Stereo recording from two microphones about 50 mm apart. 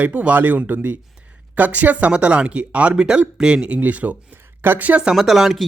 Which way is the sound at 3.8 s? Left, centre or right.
Right.